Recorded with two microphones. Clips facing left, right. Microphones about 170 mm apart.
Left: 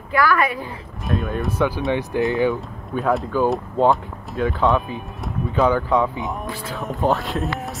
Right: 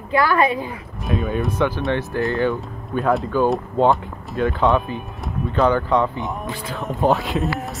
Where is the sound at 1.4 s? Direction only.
10° left (ahead or behind).